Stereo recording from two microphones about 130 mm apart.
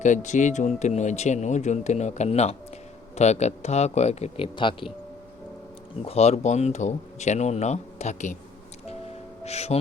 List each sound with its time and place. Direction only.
0.0 s speech: 70° left (ahead or behind)
4.5 s speech: 40° left (ahead or behind)
6.1 s speech: 55° left (ahead or behind)
9.4 s music: 55° left (ahead or behind)